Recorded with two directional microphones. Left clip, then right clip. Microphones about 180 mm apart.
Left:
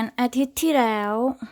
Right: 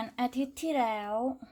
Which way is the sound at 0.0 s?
45° left (ahead or behind).